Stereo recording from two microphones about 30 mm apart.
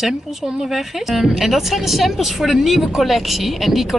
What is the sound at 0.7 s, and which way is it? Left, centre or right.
Speech, centre.